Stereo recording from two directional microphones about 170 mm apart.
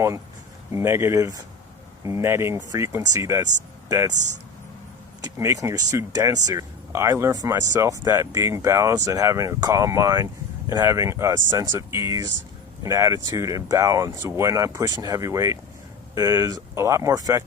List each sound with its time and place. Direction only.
0.7 s speech: 15° right (ahead or behind)
5.2 s speech: 20° right (ahead or behind)